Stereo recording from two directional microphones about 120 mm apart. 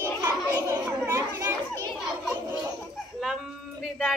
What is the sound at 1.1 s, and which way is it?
Speech, 25° right (ahead or behind).